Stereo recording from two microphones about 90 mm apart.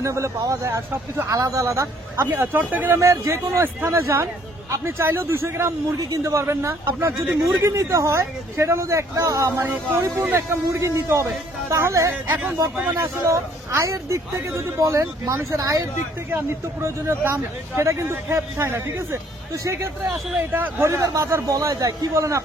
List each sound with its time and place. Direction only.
0.0 s speech: 35° right (ahead or behind)
2.3 s a man's voice: 20° right (ahead or behind)
3.0 s a man's voice: 35° right (ahead or behind)
12.7 s speech: 15° right (ahead or behind)
13.2 s speech: 30° right (ahead or behind)